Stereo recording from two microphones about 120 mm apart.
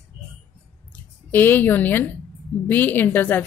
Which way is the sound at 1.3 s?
15° left (ahead or behind).